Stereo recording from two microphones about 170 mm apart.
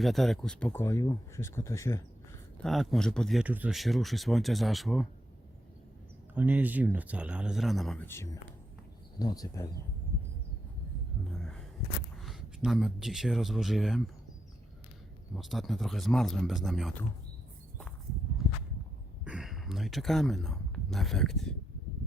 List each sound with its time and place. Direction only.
0.0 s speech: centre (ahead or behind); by 2.0 s 15° left (ahead or behind)
2.6 s speech: centre (ahead or behind)
3.4 s speech: 10° right (ahead or behind)
6.3 s speech: 10° right (ahead or behind)
8.0 s speech: 15° left (ahead or behind)
12.2 s speech: centre (ahead or behind)
15.4 s speech: centre (ahead or behind)
19.2 s speech: 5° right (ahead or behind)